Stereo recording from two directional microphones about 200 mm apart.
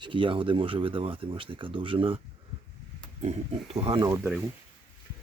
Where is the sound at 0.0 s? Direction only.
25° right (ahead or behind); by 4.4 s 10° right (ahead or behind).